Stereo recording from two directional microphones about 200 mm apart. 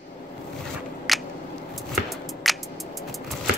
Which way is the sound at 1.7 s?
Centre (ahead or behind).